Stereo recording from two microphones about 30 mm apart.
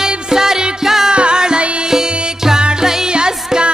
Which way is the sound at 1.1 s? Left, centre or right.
Right.